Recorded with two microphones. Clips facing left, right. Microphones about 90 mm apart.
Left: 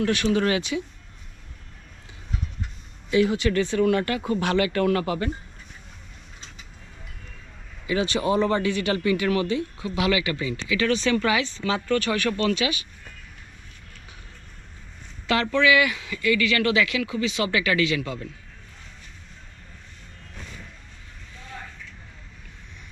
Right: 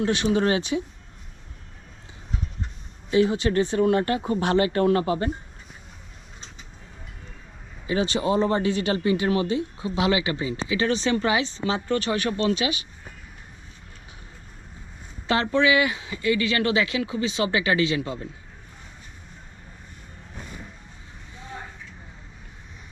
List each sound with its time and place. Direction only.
0.0 s speech: 25° right (ahead or behind)
3.1 s speech: 30° right (ahead or behind)
7.9 s speech: 30° right (ahead or behind)
15.3 s speech: 25° right (ahead or behind)
20.3 s music: 15° right (ahead or behind)
21.3 s a sound: 20° right (ahead or behind)